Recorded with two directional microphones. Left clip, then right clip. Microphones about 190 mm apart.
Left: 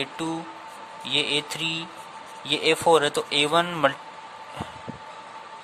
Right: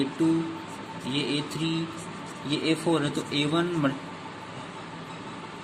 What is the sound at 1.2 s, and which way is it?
Speech, 50° left (ahead or behind).